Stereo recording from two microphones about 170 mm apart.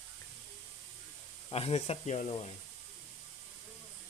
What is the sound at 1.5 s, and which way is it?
Speech, 35° left (ahead or behind).